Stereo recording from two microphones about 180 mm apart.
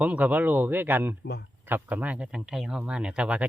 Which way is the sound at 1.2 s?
70° left (ahead or behind).